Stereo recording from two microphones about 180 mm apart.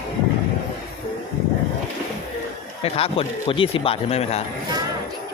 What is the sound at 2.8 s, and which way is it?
Speech, 30° left (ahead or behind).